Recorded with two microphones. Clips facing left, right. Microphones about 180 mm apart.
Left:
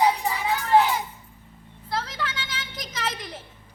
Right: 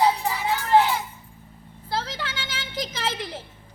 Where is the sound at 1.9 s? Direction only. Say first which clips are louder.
Even; 30° right (ahead or behind).